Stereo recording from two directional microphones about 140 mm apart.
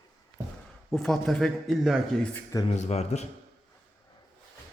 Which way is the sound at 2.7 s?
55° left (ahead or behind).